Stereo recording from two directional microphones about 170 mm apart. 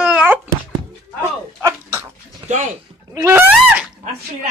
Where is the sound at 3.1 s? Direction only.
15° right (ahead or behind).